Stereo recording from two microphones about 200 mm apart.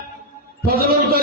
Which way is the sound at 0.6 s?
50° right (ahead or behind).